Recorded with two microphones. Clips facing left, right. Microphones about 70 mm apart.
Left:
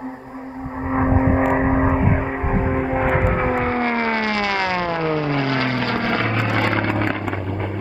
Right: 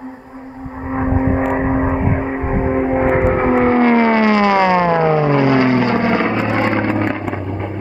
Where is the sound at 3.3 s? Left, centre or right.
Right; by 7.7 s centre.